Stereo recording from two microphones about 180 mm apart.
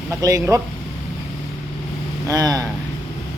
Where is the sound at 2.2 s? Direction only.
20° right (ahead or behind).